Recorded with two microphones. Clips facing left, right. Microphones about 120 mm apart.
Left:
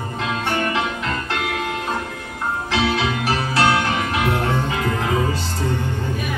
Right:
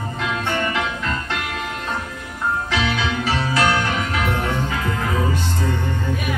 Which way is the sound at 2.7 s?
25° left (ahead or behind).